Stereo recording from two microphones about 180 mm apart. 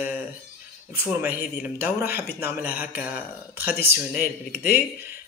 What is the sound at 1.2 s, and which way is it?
Speech, 10° right (ahead or behind).